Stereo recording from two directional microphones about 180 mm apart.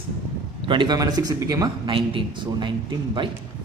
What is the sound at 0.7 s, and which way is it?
A man's voice, 25° right (ahead or behind).